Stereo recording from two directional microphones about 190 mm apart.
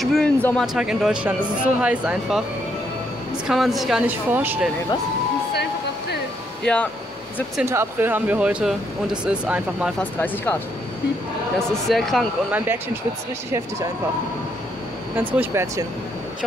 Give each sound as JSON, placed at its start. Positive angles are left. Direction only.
{"t": 0.0, "sound": "speech", "side_deg": 5}
{"t": 3.4, "sound": "speech", "side_deg": 0}
{"t": 5.5, "sound": "a sound", "side_deg": 60}
{"t": 6.6, "sound": "speech", "side_deg": 5}
{"t": 7.6, "sound": "speech", "side_deg": -15}
{"t": 9.9, "sound": "speech", "side_deg": 10}
{"t": 11.7, "sound": "speech", "side_deg": 0}
{"t": 15.1, "sound": "speech", "side_deg": -10}